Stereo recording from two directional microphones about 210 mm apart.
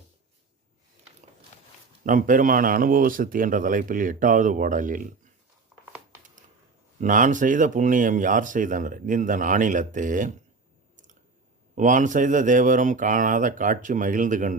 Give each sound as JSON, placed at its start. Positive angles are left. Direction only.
{"t": 2.0, "sound": "speech", "side_deg": -40}
{"t": 7.0, "sound": "speech", "side_deg": -40}
{"t": 11.7, "sound": "speech", "side_deg": -35}